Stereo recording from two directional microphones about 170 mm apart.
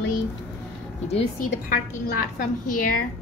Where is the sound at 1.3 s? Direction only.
55° left (ahead or behind).